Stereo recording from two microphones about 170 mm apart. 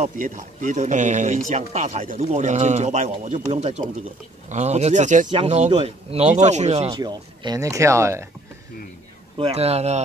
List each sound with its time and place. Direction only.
0.0 s speech: 45° right (ahead or behind)
5.7 s speech: 35° right (ahead or behind)
6.9 s speech: 25° right (ahead or behind)
9.4 s speech: 35° right (ahead or behind)